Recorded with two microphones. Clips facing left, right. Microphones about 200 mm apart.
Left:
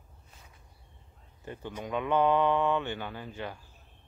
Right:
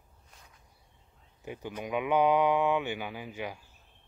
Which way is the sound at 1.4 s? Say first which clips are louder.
Right 1 dB; 10° right (ahead or behind).